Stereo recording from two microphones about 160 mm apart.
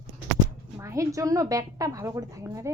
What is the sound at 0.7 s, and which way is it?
A woman's voice, 20° right (ahead or behind).